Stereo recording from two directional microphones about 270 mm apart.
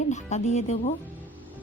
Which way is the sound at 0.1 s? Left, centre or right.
Left.